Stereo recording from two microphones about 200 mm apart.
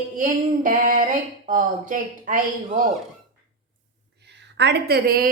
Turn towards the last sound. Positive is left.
turn(degrees=-50)  # may be behind; listen again after turning